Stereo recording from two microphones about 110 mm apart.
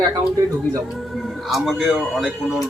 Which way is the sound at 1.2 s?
Centre (ahead or behind).